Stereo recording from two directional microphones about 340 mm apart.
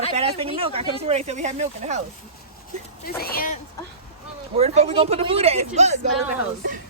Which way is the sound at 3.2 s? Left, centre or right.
Left.